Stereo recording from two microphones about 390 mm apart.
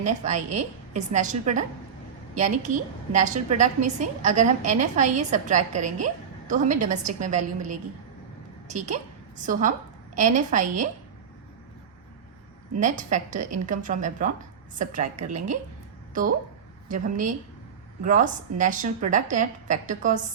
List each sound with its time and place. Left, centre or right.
0.0 s a woman's voice: centre
12.8 s a woman's voice: centre
16.9 s a woman's voice: centre